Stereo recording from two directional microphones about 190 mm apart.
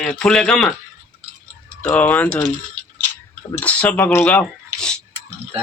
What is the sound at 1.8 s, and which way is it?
Speech, 5° left (ahead or behind).